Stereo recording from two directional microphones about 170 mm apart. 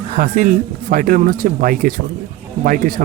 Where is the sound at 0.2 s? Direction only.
55° right (ahead or behind).